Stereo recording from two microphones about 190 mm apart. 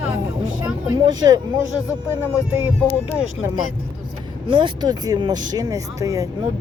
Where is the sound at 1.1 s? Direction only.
20° right (ahead or behind).